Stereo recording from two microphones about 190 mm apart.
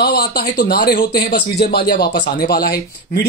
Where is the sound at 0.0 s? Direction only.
55° left (ahead or behind).